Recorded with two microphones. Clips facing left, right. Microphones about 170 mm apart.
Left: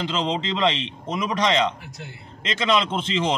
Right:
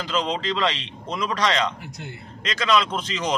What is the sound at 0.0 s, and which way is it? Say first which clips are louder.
Speech: even; 25° left (ahead or behind).